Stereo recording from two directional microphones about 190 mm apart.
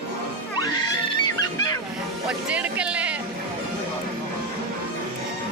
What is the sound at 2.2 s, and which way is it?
Music, 5° right (ahead or behind).